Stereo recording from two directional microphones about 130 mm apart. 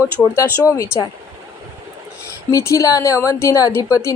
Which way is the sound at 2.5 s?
25° left (ahead or behind).